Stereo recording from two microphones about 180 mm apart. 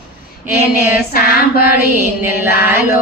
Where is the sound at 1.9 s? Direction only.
10° right (ahead or behind).